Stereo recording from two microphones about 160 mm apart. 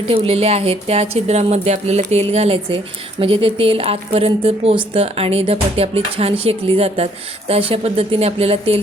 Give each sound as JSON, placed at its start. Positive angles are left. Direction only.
{"t": 0.1, "sound": "a woman's voice", "side_deg": -40}